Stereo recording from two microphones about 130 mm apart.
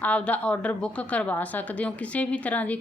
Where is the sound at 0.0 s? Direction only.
10° left (ahead or behind).